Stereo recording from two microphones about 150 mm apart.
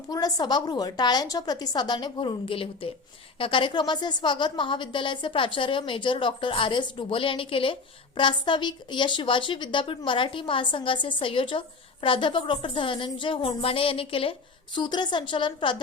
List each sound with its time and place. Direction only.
0.1 s a woman's voice: 25° left (ahead or behind)